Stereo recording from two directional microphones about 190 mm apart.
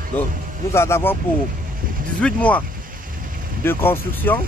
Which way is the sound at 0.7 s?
15° left (ahead or behind).